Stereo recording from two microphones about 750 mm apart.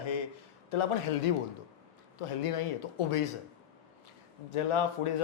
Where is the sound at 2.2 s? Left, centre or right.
Left.